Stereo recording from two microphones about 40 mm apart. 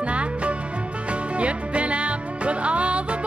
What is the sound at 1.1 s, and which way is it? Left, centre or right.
Music, right.